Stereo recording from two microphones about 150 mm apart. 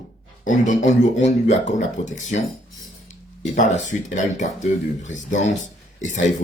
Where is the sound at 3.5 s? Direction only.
55° left (ahead or behind).